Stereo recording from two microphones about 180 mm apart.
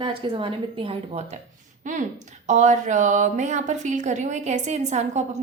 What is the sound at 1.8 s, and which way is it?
A woman's voice, 45° right (ahead or behind).